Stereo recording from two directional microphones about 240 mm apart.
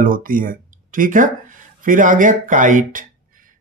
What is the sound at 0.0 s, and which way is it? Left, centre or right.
Speech, right.